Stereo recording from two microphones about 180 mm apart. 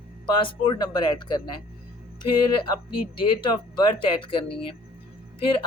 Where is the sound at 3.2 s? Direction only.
25° left (ahead or behind).